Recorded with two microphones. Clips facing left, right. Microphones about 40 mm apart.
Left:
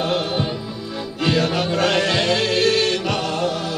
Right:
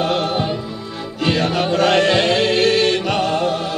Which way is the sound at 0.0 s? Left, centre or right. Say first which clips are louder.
Right 3 dB; right.